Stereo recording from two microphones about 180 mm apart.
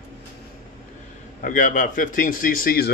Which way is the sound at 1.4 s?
45° left (ahead or behind).